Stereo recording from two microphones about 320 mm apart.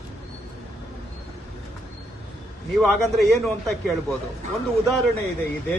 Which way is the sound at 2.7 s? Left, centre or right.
Centre.